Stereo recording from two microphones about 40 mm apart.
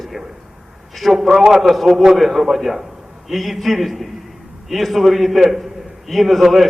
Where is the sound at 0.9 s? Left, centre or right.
Centre.